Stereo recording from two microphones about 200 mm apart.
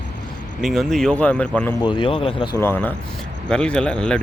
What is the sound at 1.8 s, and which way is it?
Speech, 25° left (ahead or behind).